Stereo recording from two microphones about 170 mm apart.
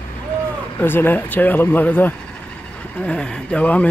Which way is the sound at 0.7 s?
10° left (ahead or behind).